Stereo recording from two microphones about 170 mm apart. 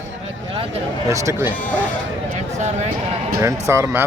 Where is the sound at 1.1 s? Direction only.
20° right (ahead or behind).